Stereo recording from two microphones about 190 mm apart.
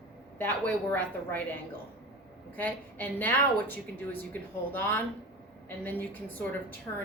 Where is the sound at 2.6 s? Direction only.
10° left (ahead or behind).